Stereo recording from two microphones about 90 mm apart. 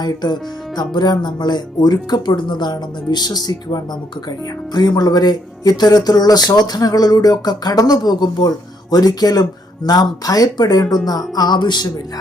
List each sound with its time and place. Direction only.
0.0 s speech: 50° left (ahead or behind)